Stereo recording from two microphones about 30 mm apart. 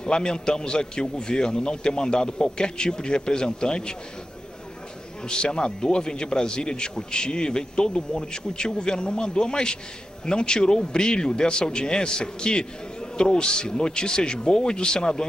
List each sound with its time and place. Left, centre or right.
0.0 s a man's voice: left
5.2 s a man's voice: left